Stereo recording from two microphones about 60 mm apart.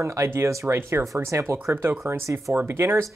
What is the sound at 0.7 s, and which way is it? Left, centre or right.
Speech, right.